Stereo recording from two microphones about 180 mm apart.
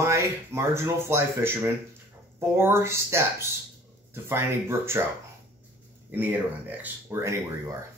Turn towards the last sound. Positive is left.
turn(degrees=-15)  # may be behind; listen again after turning